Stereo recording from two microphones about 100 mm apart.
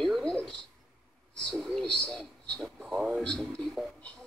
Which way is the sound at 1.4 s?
5° left (ahead or behind).